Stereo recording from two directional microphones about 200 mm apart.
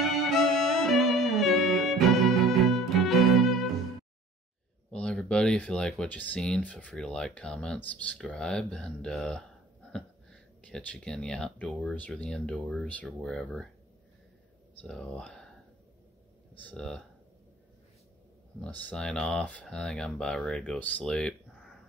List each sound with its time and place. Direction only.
0.0 s music: centre (ahead or behind)
4.9 s speech: 5° left (ahead or behind)
14.8 s speech: 5° left (ahead or behind)
16.6 s speech: 5° left (ahead or behind)
18.6 s speech: 5° left (ahead or behind)